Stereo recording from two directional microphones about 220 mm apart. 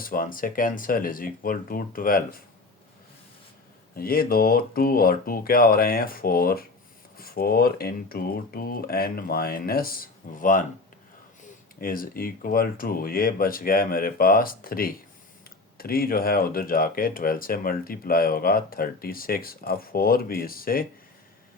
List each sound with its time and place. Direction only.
0.0 s speech: 40° left (ahead or behind)
3.9 s speech: 45° left (ahead or behind)
11.8 s speech: 40° left (ahead or behind)